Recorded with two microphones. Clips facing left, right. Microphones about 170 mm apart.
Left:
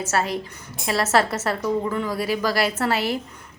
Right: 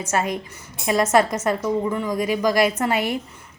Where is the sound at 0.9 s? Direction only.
15° right (ahead or behind).